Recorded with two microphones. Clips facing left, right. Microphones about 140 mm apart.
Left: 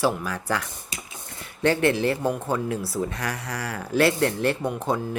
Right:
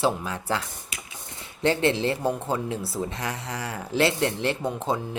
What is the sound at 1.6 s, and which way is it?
Speech, 25° right (ahead or behind).